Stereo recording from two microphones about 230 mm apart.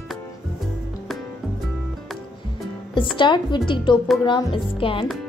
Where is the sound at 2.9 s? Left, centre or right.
Left.